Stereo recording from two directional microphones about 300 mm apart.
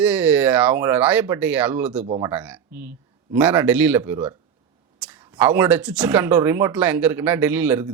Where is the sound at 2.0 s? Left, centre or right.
Centre.